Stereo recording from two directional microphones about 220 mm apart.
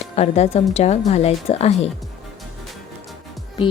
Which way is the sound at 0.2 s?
30° left (ahead or behind).